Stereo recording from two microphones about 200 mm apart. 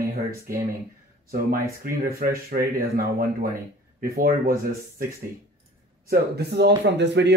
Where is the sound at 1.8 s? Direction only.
45° right (ahead or behind).